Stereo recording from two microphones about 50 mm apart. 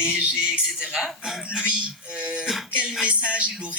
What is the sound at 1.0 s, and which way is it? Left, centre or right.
Speech, centre.